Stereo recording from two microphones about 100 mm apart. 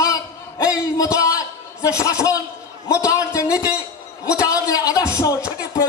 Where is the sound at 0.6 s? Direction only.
35° left (ahead or behind).